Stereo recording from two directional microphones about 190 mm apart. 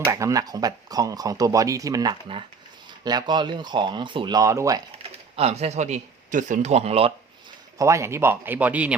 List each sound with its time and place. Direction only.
0.0 s speech: 15° right (ahead or behind)
5.0 s speech: 35° right (ahead or behind)
7.8 s speech: 15° right (ahead or behind)